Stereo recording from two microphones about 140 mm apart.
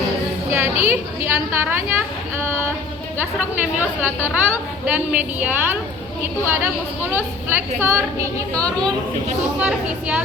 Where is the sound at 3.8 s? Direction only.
10° right (ahead or behind).